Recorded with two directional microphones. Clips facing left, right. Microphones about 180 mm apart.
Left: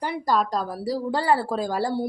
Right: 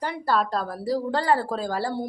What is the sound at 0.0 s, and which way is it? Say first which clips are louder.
Speech: left 1 dB; 10° left (ahead or behind).